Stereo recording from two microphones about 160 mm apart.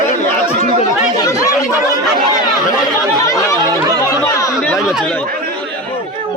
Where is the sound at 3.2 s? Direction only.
20° left (ahead or behind).